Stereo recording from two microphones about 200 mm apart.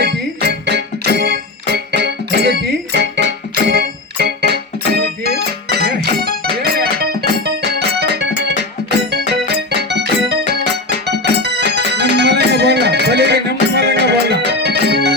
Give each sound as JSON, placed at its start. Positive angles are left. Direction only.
{"t": 0.0, "sound": "music", "side_deg": -55}